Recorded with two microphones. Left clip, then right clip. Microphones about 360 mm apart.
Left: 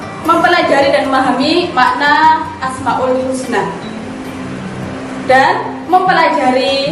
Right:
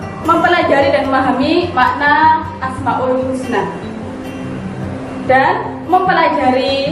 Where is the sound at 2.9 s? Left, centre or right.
Centre.